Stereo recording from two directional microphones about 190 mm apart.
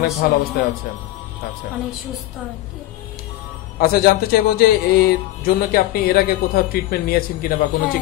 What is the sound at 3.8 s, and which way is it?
Speech, 50° left (ahead or behind).